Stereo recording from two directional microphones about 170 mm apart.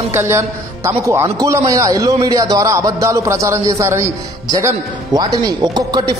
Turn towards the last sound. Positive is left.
turn(degrees=-25)  # may be behind; listen again after turning